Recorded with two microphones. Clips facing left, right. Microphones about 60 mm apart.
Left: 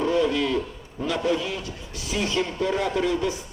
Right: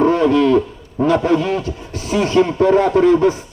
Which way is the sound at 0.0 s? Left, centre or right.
Right.